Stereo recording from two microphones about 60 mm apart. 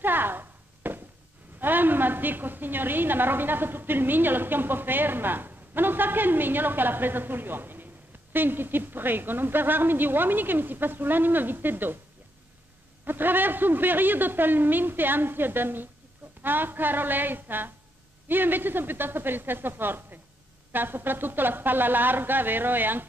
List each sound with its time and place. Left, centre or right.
0.0 s a sound: right
1.6 s a woman's voice: right
13.0 s a woman's voice: right